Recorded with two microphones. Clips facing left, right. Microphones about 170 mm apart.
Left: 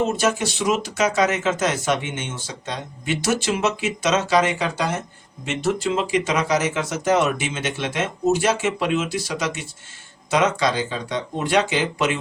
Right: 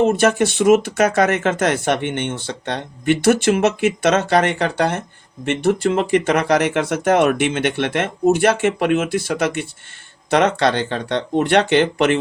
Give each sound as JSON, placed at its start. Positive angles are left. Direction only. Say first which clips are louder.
{"t": 0.0, "sound": "speech", "louder": "right 6 dB", "side_deg": -60}